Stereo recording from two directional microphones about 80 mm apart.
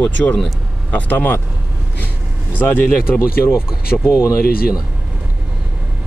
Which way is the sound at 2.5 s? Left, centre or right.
Left.